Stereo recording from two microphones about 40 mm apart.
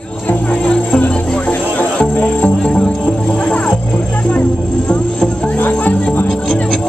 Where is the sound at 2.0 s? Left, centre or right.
Left.